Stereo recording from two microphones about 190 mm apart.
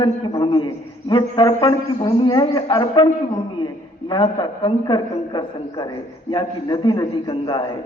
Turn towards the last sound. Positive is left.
turn(degrees=25)  # may be behind; listen again after turning